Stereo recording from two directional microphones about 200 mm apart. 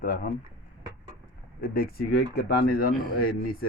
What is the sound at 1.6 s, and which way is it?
Speech, 50° left (ahead or behind).